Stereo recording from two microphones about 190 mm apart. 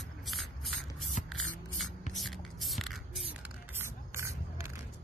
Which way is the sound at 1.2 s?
40° left (ahead or behind).